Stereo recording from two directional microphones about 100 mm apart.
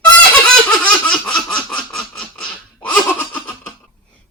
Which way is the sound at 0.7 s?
5° left (ahead or behind).